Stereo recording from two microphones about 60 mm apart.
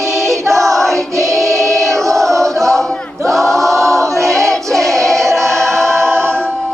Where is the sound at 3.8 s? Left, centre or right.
Right.